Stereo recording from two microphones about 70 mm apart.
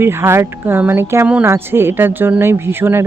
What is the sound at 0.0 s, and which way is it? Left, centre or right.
Speech, right.